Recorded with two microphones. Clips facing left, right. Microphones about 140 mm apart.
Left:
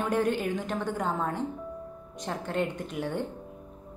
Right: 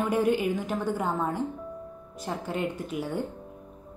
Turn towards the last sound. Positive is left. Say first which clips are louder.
# right 1 dB
turn(degrees=-5)  # may be behind; listen again after turning